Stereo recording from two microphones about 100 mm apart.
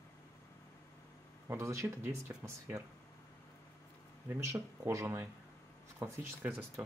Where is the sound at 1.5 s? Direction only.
30° right (ahead or behind).